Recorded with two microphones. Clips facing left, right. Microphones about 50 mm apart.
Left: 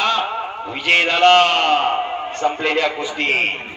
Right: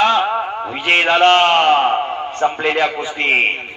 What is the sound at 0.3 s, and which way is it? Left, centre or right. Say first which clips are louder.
A man's voice: right 4 dB; right.